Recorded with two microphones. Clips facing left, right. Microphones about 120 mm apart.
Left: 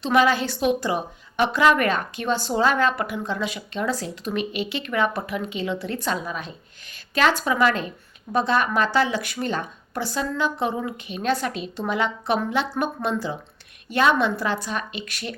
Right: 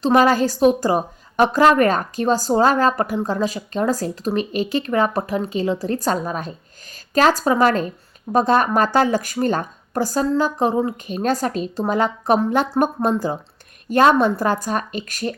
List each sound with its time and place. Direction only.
0.0 s a woman's voice: 40° right (ahead or behind)